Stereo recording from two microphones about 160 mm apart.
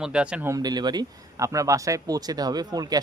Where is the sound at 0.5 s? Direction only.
25° right (ahead or behind).